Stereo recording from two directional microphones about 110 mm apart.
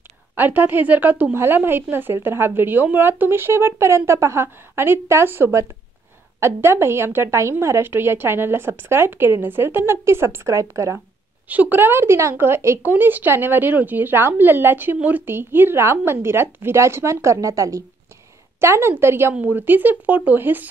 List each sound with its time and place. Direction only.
0.4 s speech: 20° right (ahead or behind)
11.4 s speech: 15° right (ahead or behind)